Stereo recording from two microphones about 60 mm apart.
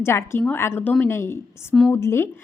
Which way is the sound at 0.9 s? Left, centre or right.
Left.